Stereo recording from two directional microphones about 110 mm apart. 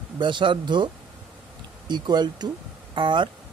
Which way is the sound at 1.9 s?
40° right (ahead or behind).